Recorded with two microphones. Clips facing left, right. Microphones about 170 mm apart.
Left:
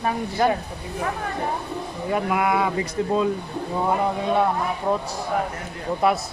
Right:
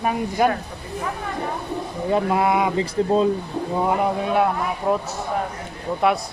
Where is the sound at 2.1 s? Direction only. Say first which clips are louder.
Right 2 dB; 25° right (ahead or behind).